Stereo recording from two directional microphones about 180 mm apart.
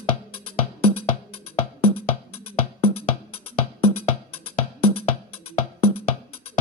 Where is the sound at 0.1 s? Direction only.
30° left (ahead or behind).